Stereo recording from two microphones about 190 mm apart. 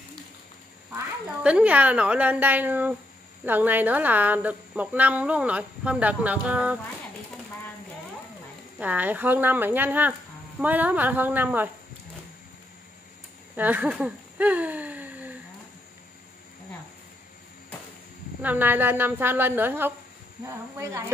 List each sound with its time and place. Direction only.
0.9 s speech: 5° right (ahead or behind)
8.7 s speech: 10° right (ahead or behind)
13.6 s a sound: 10° right (ahead or behind)
18.4 s speech: 10° right (ahead or behind)